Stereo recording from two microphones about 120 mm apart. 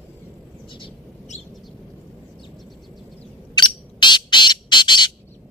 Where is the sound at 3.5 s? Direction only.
40° left (ahead or behind).